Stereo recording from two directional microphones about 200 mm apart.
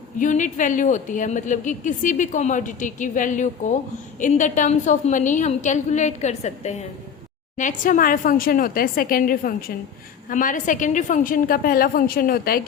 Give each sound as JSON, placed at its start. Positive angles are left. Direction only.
{"t": 0.2, "sound": "a woman's voice", "side_deg": 40}